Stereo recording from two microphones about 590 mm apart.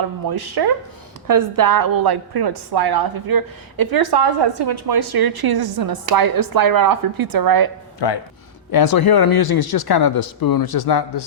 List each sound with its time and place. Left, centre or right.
0.0 s a woman's voice: right
7.9 s speech: left